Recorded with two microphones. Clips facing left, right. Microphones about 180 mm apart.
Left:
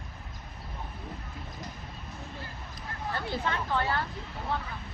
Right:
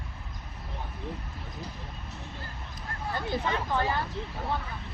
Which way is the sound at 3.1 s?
15° right (ahead or behind).